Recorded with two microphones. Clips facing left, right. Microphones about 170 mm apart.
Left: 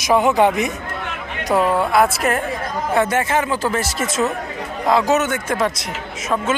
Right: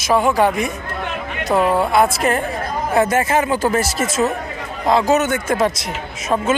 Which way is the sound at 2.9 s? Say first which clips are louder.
Right 2 dB; 40° right (ahead or behind).